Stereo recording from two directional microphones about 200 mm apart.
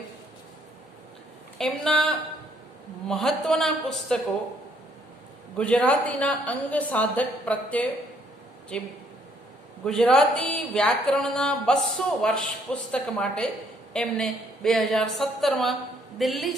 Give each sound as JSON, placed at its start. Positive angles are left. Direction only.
{"t": 1.5, "sound": "speech", "side_deg": 5}
{"t": 5.5, "sound": "a woman's voice", "side_deg": 5}